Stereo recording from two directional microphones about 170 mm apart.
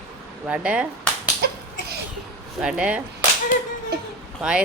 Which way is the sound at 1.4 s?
70° right (ahead or behind).